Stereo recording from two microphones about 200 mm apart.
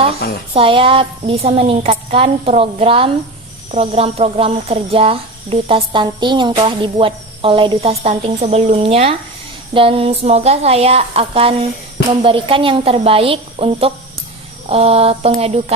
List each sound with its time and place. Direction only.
0.5 s speech: 25° right (ahead or behind)